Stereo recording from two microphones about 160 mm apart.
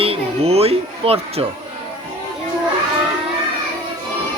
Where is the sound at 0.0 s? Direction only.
40° right (ahead or behind).